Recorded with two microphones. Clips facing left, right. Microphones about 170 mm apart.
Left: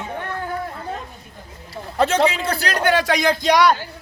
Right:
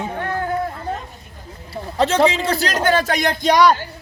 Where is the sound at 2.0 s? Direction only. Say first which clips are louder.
Right 3 dB; 30° right (ahead or behind).